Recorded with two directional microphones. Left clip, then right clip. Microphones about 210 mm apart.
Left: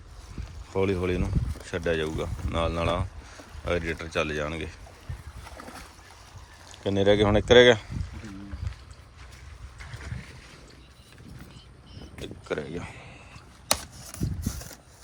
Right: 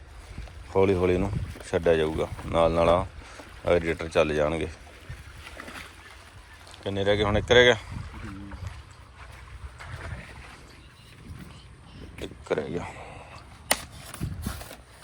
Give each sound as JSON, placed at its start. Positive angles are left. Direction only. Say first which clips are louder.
{"t": 0.7, "sound": "speech", "louder": "right 5 dB", "side_deg": 15}
{"t": 6.7, "sound": "speech", "louder": "left 3 dB", "side_deg": 25}
{"t": 12.2, "sound": "a sound", "louder": "right 3 dB", "side_deg": 10}